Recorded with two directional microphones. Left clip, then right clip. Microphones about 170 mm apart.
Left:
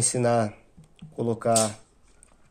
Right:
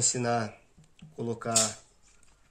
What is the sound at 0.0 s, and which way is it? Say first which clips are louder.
Speech: left 6 dB; 40° left (ahead or behind).